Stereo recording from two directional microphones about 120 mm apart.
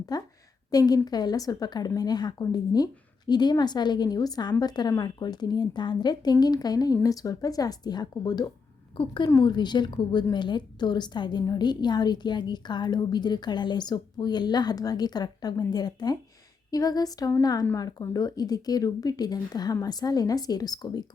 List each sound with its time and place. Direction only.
0.1 s a woman's voice: 35° left (ahead or behind)